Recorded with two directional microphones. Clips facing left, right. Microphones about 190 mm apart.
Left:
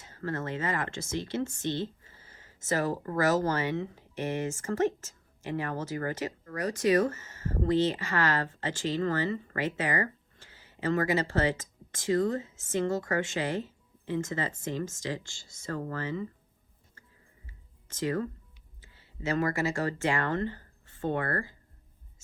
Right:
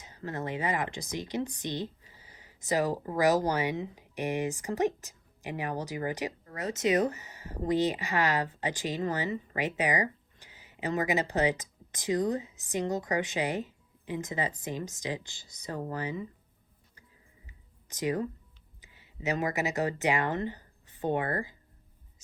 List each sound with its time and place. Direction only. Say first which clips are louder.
0.0 s speech: left 2 dB; 15° right (ahead or behind)
17.4 s a sound: left 1 dB; 15° right (ahead or behind)
18.8 s speech: left 1 dB; 15° right (ahead or behind)